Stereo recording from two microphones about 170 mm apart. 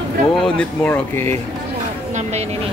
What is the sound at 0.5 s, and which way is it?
Speech, 10° left (ahead or behind).